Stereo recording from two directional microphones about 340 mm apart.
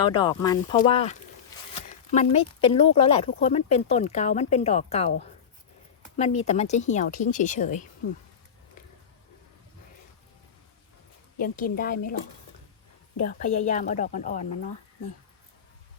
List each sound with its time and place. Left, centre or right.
0.0 s speech: centre
1.7 s zipper: centre
2.7 s speech: centre
11.3 s speech: left
13.4 s speech: left